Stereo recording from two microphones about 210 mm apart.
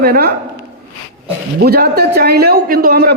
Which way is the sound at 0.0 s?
50° right (ahead or behind).